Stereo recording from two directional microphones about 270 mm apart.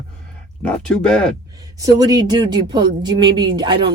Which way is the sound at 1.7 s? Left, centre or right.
Centre.